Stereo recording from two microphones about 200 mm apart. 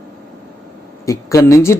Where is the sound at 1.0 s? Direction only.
15° left (ahead or behind).